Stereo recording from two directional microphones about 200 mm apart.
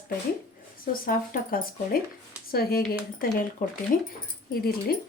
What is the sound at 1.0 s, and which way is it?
Speech, 45° left (ahead or behind).